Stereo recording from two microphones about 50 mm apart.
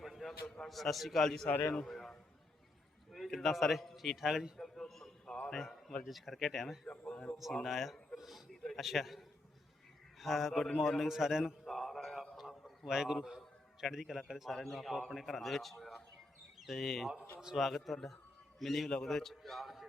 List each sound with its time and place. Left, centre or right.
0.0 s a sound: centre
0.6 s a man's voice: centre
4.5 s a sound: centre
6.1 s a man's voice: centre
6.8 s speech: left
7.6 s a man's voice: centre
8.1 s a sound: centre
8.6 s a man's voice: centre
11.7 s mantra: centre
12.2 s a sound: centre
12.9 s a man's voice: centre
17.4 s speech: centre
17.7 s a man's voice: centre